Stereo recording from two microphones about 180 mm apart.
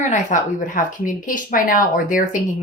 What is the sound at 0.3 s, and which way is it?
Speech, 45° left (ahead or behind).